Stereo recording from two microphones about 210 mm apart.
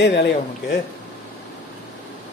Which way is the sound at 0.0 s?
55° left (ahead or behind).